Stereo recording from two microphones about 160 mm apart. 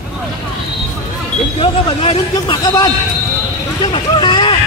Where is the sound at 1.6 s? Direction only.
35° left (ahead or behind).